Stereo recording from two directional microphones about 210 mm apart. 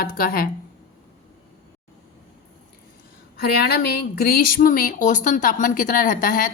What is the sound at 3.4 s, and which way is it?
Speech, 50° left (ahead or behind).